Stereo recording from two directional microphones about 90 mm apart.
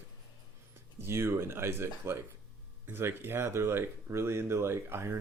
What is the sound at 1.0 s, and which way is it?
Speech, 30° right (ahead or behind).